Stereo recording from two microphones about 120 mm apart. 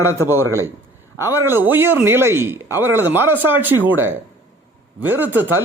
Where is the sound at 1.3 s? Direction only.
20° right (ahead or behind).